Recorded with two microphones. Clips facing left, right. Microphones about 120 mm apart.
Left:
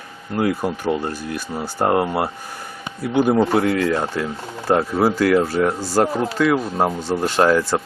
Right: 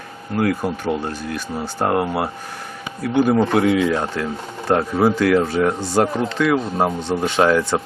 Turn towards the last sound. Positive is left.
turn(degrees=0)  # may be behind; listen again after turning